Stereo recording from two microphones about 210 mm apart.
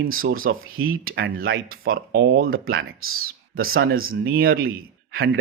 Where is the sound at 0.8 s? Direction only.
75° right (ahead or behind).